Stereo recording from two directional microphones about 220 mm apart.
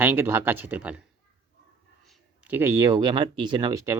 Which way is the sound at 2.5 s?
10° right (ahead or behind).